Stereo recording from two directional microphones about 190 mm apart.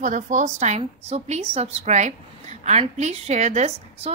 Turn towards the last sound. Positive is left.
turn(degrees=-35)  # may be behind; listen again after turning